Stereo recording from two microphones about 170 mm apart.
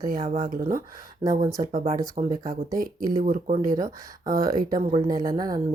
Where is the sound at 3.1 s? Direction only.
50° right (ahead or behind).